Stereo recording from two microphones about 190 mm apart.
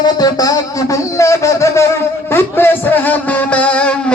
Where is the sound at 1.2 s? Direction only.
15° left (ahead or behind).